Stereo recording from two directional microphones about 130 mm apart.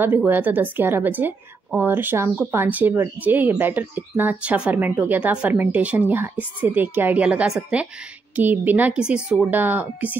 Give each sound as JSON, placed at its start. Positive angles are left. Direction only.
{"t": 0.0, "sound": "speech", "side_deg": -15}